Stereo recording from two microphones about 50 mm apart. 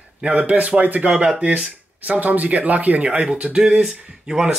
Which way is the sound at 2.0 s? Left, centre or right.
Right.